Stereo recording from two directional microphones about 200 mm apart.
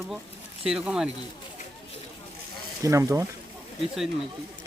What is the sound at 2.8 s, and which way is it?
Speech, 15° right (ahead or behind).